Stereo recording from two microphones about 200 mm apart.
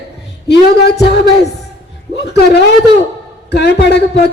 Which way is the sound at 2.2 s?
55° left (ahead or behind).